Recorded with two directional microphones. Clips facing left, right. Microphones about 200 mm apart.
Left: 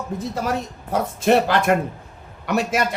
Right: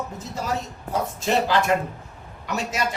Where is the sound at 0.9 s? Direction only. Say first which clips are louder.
Left 6 dB; 55° left (ahead or behind).